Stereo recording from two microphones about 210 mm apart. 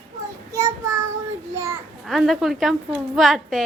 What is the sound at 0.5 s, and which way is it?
Child singing, 15° right (ahead or behind).